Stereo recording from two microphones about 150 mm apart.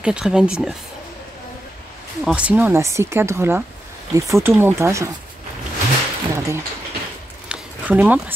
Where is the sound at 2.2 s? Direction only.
10° right (ahead or behind).